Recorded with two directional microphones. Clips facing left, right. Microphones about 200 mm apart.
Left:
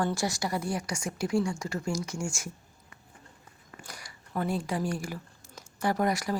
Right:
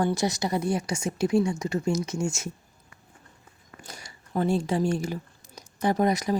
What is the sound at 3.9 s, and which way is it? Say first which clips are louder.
Speech: right 5 dB; 25° right (ahead or behind).